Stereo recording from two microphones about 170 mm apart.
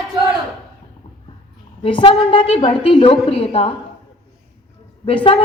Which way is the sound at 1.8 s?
30° left (ahead or behind).